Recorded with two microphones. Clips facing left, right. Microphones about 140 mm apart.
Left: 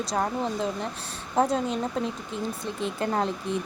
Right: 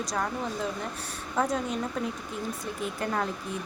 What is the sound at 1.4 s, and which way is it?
Speech, 30° left (ahead or behind).